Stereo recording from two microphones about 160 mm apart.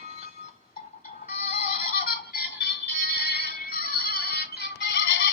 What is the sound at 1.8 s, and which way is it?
Music, 70° left (ahead or behind).